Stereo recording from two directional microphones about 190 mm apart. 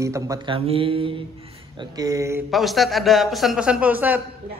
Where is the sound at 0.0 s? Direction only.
15° right (ahead or behind).